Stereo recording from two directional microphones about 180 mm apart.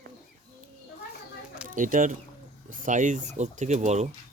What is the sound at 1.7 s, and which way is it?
Speech, 50° right (ahead or behind).